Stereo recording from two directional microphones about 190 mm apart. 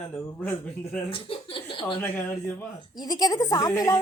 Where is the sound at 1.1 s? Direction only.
30° left (ahead or behind).